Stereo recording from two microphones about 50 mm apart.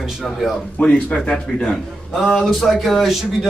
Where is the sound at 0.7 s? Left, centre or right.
Left.